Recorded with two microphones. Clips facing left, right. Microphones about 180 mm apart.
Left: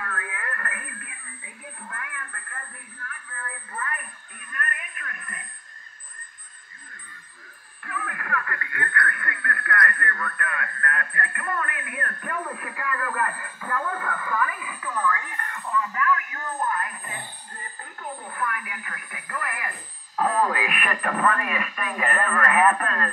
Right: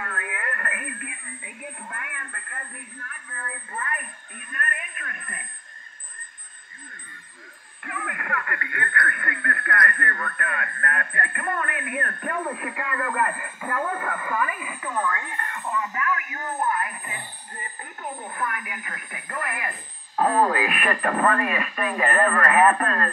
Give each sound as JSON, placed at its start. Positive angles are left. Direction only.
{"t": 0.0, "sound": "radio", "side_deg": -25}
{"t": 1.9, "sound": "a man's voice", "side_deg": -25}
{"t": 4.4, "sound": "radio", "side_deg": -25}
{"t": 7.8, "sound": "speech", "side_deg": -25}